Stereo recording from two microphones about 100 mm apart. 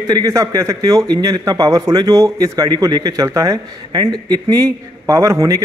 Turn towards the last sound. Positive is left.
turn(degrees=-30)  # may be behind; listen again after turning